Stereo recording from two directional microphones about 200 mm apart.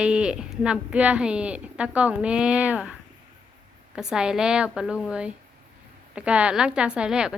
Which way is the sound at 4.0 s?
5° right (ahead or behind).